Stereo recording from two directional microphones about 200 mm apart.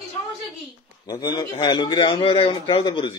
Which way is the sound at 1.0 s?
20° left (ahead or behind).